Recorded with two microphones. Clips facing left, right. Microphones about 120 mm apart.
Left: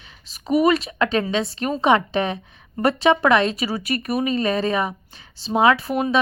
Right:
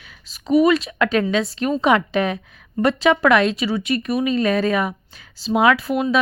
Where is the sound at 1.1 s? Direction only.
30° left (ahead or behind).